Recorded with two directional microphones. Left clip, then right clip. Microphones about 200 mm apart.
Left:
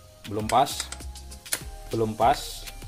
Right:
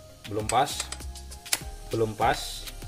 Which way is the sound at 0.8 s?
Centre (ahead or behind).